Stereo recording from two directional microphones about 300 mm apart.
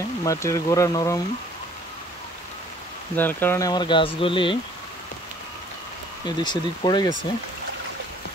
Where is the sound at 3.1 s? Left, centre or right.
Centre.